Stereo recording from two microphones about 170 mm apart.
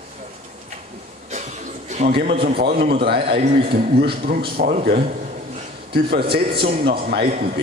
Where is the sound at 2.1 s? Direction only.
60° right (ahead or behind).